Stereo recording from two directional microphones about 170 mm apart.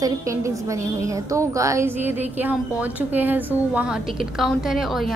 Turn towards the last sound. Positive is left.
turn(degrees=0)  # may be behind; listen again after turning